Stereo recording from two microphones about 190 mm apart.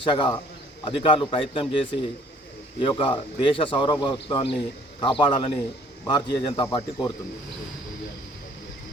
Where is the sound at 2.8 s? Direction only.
25° left (ahead or behind).